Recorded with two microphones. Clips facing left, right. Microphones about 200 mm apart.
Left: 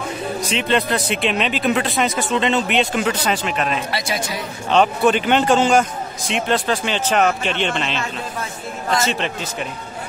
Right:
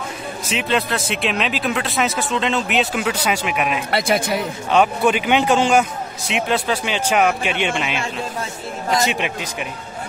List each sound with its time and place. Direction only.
0.4 s speech: 5° right (ahead or behind)
3.9 s a man's voice: 55° right (ahead or behind)
4.6 s a man's voice: 10° right (ahead or behind)